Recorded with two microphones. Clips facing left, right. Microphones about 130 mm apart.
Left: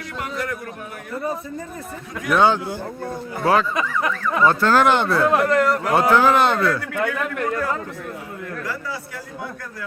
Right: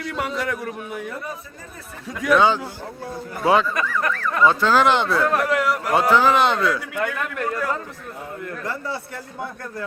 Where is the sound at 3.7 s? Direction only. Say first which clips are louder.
Left 1 dB; 15° left (ahead or behind).